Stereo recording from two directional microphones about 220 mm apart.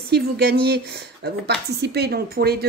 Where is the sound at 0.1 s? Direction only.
45° right (ahead or behind).